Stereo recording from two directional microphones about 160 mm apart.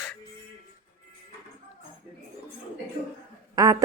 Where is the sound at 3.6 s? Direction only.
20° right (ahead or behind).